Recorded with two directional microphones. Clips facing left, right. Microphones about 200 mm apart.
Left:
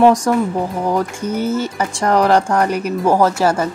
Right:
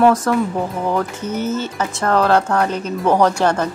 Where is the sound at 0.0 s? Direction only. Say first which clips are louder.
Left 2 dB; 15° left (ahead or behind).